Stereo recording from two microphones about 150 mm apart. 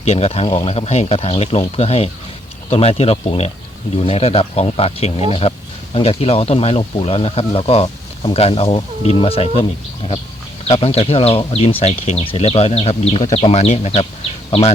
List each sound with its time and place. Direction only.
0.0 s speech: 45° left (ahead or behind)
10.7 s speech: 40° left (ahead or behind)